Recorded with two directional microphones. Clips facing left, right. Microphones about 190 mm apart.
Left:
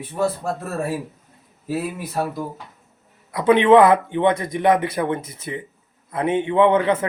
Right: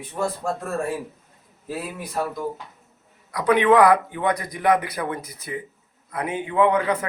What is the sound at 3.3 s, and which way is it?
A man's voice, 25° left (ahead or behind).